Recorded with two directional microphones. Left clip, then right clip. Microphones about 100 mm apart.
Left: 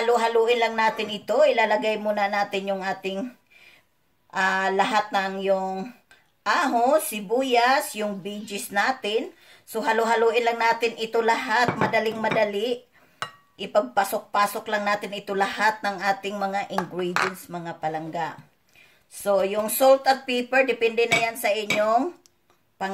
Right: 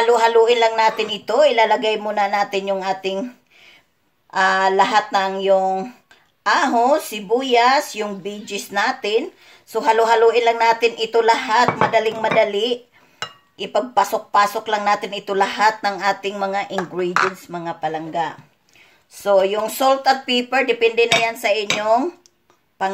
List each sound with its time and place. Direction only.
0.0 s speech: 35° right (ahead or behind)
19.1 s speech: 30° right (ahead or behind)